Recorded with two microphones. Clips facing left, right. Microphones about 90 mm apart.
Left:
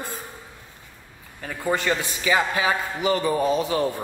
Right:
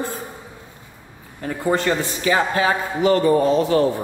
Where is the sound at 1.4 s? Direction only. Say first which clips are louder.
Right 4 dB; 20° right (ahead or behind).